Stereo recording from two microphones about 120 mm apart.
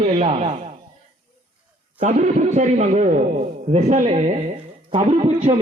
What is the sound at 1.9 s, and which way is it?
A man's voice, 75° right (ahead or behind).